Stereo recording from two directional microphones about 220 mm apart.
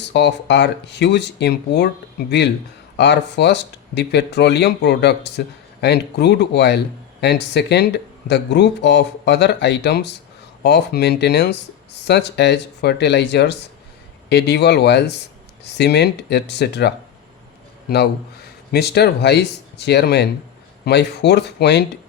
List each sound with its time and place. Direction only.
0.0 s a man's voice: 50° left (ahead or behind)